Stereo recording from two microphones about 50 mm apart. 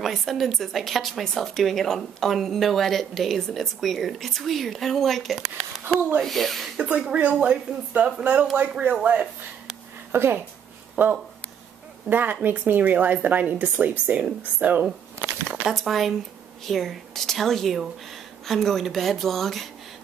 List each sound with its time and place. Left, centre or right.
0.0 s a woman's voice: centre
6.8 s speech: right
10.1 s a woman's voice: right
11.0 s speech: right
15.6 s a woman's voice: centre